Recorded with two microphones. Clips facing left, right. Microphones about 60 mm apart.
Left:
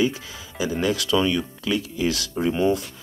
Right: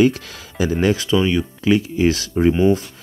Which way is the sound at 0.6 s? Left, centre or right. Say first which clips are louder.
Right 6 dB; right.